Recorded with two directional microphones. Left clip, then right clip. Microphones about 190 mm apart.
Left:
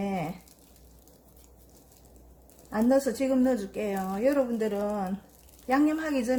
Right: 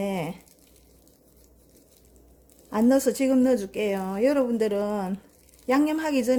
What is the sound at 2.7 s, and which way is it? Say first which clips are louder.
Speech: right 3 dB; 50° right (ahead or behind).